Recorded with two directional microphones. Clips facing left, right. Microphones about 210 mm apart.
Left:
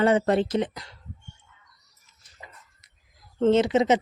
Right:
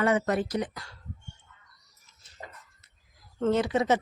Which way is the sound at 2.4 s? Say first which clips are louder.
Right 4 dB; 50° right (ahead or behind).